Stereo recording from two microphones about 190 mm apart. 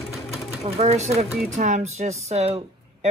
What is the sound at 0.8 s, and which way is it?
Speech, 35° right (ahead or behind).